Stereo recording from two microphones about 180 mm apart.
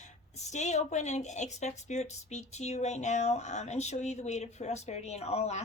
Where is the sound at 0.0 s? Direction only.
40° left (ahead or behind).